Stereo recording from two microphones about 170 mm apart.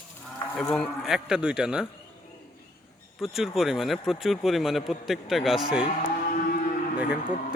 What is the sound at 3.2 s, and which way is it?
A man's voice, centre (ahead or behind).